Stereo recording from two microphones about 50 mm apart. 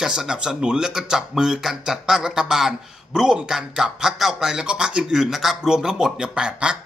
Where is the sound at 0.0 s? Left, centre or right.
Centre.